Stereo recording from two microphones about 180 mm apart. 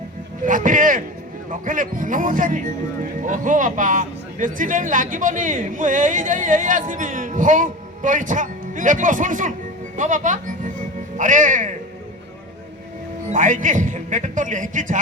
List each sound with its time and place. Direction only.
0.4 s speech: 45° right (ahead or behind)
9.9 s music: 45° right (ahead or behind)
13.3 s speech: 45° right (ahead or behind)